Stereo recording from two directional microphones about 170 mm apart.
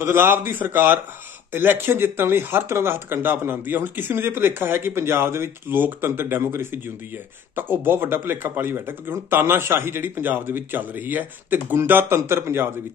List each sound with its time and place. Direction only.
0.0 s speech: 15° right (ahead or behind)